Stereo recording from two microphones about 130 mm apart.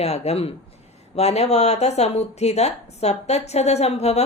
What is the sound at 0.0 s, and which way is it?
Speech, 55° left (ahead or behind).